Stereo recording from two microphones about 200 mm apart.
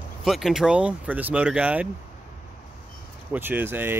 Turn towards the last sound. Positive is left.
turn(degrees=-10)  # may be behind; listen again after turning